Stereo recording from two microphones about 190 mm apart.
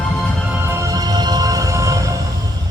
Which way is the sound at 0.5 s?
15° right (ahead or behind).